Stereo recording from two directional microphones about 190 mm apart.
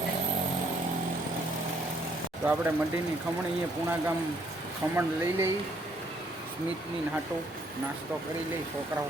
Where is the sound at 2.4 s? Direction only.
10° right (ahead or behind).